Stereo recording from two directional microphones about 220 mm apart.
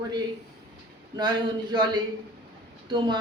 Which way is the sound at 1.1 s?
20° right (ahead or behind).